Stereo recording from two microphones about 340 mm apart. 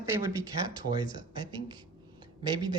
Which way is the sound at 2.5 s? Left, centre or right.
Centre.